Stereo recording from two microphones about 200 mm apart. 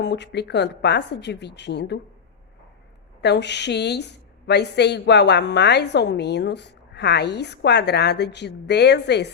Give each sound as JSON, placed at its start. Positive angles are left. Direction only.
{"t": 0.0, "sound": "a woman's voice", "side_deg": 60}
{"t": 3.2, "sound": "a woman's voice", "side_deg": 60}